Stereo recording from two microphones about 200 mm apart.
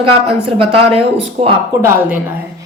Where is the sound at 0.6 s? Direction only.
30° right (ahead or behind).